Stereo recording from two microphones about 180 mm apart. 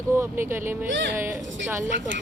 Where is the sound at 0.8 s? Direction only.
85° right.